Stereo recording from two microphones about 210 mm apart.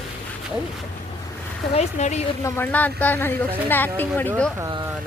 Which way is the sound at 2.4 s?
10° left (ahead or behind).